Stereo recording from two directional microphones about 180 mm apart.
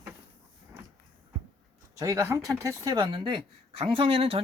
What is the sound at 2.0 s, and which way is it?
Speech, 15° right (ahead or behind).